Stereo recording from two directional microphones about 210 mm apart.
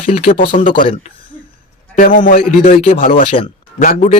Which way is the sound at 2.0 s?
40° left (ahead or behind).